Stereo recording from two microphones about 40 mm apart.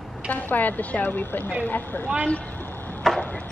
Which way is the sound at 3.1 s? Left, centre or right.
Centre.